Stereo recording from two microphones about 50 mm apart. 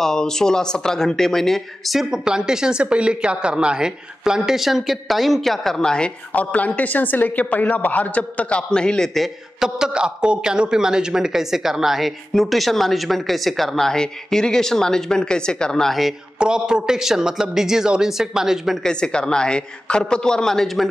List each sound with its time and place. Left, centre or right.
0.0 s a man's voice: centre
2.0 s speech: centre
6.3 s a man's voice: left
9.6 s a man's voice: centre
15.9 s a man's voice: centre
16.3 s speech: centre
18.8 s a man's voice: centre